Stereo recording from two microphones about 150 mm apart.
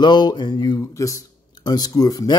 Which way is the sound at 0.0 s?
30° left (ahead or behind).